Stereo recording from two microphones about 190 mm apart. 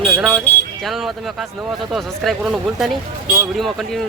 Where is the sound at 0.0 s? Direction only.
5° right (ahead or behind).